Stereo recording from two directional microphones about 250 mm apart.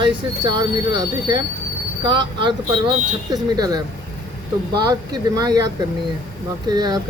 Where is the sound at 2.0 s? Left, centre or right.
Centre.